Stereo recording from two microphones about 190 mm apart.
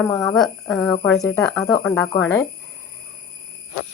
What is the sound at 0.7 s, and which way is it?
Speech, 5° left (ahead or behind).